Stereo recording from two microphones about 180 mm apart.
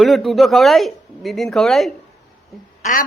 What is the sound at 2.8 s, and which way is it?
Speech, 45° left (ahead or behind).